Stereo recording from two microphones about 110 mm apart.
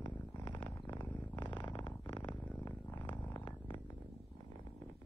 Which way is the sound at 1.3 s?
45° left (ahead or behind).